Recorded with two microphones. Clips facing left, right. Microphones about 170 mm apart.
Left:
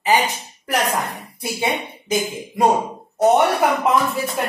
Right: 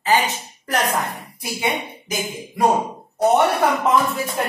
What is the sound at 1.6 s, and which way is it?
Speech, 25° left (ahead or behind).